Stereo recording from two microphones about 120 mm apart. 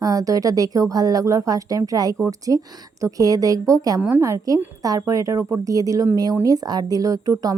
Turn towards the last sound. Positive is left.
turn(degrees=-30)  # may be behind; listen again after turning